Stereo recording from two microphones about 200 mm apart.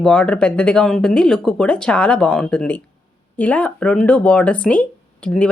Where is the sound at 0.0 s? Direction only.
5° left (ahead or behind).